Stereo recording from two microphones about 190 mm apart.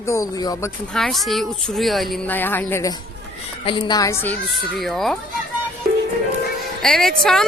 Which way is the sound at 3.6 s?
25° left (ahead or behind).